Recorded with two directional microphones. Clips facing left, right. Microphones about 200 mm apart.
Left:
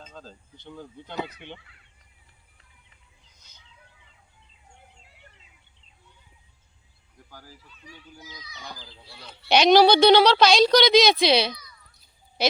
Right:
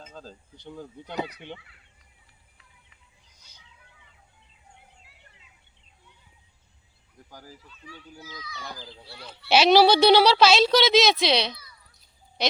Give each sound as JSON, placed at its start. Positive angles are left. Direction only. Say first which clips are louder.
{"t": 0.0, "sound": "speech", "louder": "right 1 dB", "side_deg": -10}
{"t": 7.3, "sound": "speech", "louder": "right 2 dB", "side_deg": -15}
{"t": 8.2, "sound": "a child's voice", "louder": "right 4 dB", "side_deg": 20}
{"t": 9.5, "sound": "a child's voice", "louder": "left 1 dB", "side_deg": -5}